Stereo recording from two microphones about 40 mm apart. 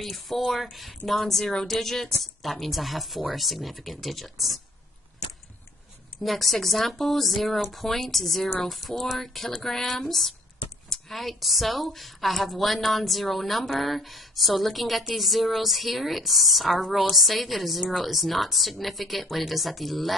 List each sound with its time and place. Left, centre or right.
0.0 s a woman's voice: centre
6.2 s a woman's voice: centre
8.9 s speech: left
9.2 s a woman's voice: centre